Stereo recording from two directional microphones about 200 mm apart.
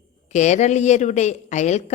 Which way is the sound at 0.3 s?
35° left (ahead or behind).